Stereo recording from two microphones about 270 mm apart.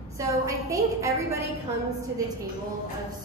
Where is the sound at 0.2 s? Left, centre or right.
Centre.